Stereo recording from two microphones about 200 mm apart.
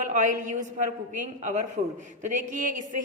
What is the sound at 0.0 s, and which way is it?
A woman's voice, 40° right (ahead or behind).